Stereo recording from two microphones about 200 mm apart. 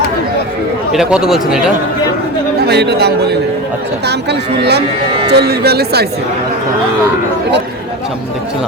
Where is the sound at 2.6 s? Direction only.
55° right (ahead or behind).